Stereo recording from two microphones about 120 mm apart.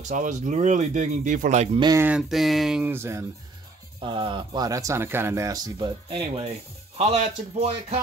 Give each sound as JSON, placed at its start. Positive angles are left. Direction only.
{"t": 0.2, "sound": "speech", "side_deg": -85}
{"t": 2.0, "sound": "speech", "side_deg": -15}
{"t": 2.2, "sound": "a sound", "side_deg": 0}
{"t": 2.8, "sound": "speech", "side_deg": -20}
{"t": 4.0, "sound": "speech", "side_deg": -45}
{"t": 4.6, "sound": "speech", "side_deg": -25}
{"t": 6.0, "sound": "speech", "side_deg": -50}